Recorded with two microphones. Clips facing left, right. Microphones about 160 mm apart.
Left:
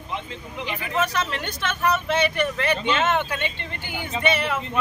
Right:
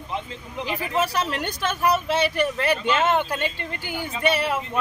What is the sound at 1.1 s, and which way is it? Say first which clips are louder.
Speech: right 1 dB; 40° right (ahead or behind).